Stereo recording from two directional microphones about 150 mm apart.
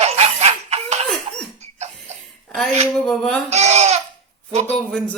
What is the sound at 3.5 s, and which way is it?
Speech, 50° right (ahead or behind).